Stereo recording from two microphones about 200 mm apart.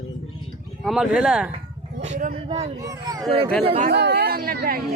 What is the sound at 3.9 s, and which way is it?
Speech, 55° right (ahead or behind).